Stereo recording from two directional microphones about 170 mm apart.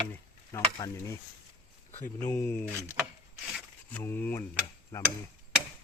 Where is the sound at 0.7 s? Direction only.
20° left (ahead or behind).